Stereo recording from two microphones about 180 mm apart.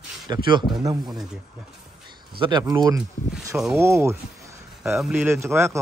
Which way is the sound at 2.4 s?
25° right (ahead or behind).